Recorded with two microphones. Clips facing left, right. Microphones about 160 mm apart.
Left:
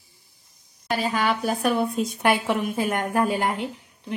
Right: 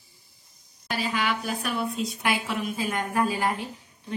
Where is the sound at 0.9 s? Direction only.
45° left (ahead or behind); by 3.7 s 65° left (ahead or behind).